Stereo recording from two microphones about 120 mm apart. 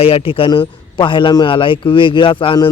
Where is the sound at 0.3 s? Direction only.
50° left (ahead or behind).